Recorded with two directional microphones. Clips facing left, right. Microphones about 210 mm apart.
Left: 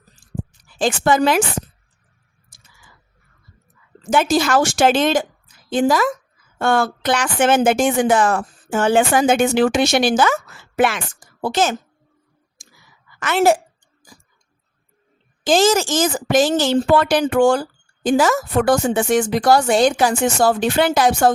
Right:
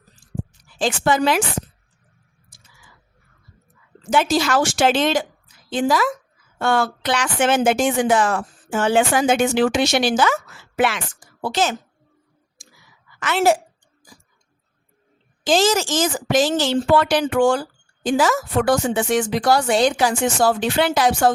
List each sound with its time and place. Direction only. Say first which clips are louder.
0.8 s speech: left 2 dB; 50° left (ahead or behind)
4.1 s a woman's voice: left 2 dB; 50° left (ahead or behind)
13.1 s a woman's voice: left 2 dB; 50° left (ahead or behind)
15.4 s speech: left 3 dB; 50° left (ahead or behind)